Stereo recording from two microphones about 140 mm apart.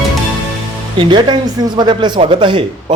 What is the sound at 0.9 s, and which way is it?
A man's voice, 35° right (ahead or behind).